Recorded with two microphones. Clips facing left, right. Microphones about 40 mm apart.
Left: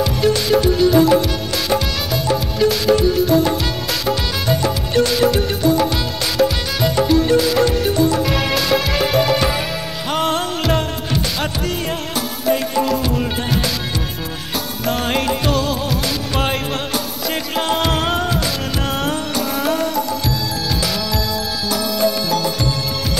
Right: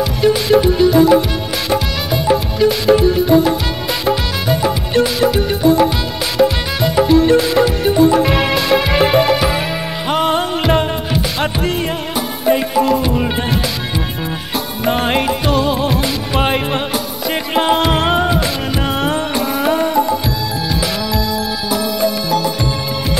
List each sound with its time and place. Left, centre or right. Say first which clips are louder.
0.0 s music: right 2 dB; centre
14.9 s music: right 4 dB; right
21.6 s music: right 1 dB; centre